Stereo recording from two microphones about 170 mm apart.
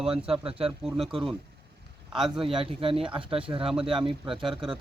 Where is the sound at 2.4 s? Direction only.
30° right (ahead or behind).